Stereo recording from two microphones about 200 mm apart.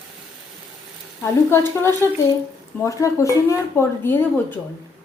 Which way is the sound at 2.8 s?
15° left (ahead or behind).